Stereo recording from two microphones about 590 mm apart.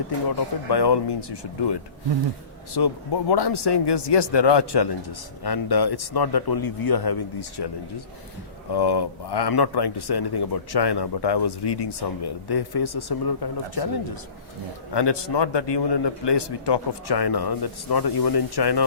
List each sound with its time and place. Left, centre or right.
0.3 s speech: left
8.7 s speech: left